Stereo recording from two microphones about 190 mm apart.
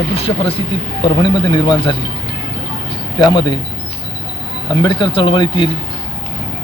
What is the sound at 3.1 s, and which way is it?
Speech, 25° left (ahead or behind).